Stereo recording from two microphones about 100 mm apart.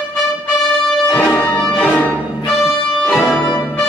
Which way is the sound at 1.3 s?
20° left (ahead or behind).